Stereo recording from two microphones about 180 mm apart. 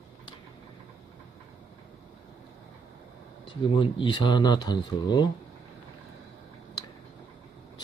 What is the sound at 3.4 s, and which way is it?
Speech, 30° left (ahead or behind).